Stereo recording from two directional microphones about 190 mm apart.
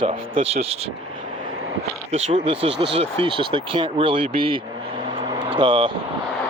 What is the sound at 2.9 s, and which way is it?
Speech, 25° right (ahead or behind).